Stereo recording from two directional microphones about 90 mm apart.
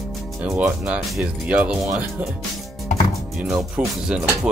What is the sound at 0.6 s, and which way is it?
Speech, 15° right (ahead or behind).